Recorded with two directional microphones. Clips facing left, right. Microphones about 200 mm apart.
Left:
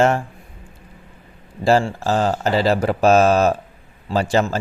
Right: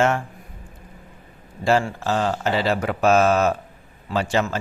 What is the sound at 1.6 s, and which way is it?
Speech, 35° left (ahead or behind).